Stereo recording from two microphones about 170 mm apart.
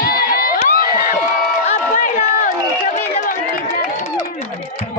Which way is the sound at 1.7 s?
45° left (ahead or behind).